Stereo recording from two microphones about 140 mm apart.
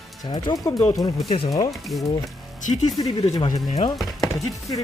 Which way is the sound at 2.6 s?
55° left (ahead or behind).